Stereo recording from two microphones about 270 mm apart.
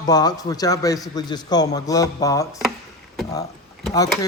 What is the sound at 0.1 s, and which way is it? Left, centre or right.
Speech, centre.